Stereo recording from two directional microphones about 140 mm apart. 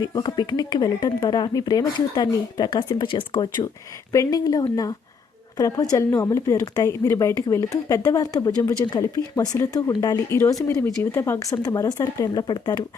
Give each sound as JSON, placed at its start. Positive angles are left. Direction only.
{"t": 0.0, "sound": "speech", "side_deg": 25}